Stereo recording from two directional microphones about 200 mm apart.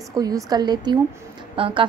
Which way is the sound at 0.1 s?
20° right (ahead or behind).